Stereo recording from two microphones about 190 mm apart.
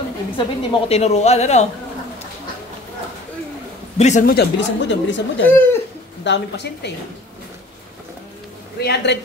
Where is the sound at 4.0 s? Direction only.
40° left (ahead or behind).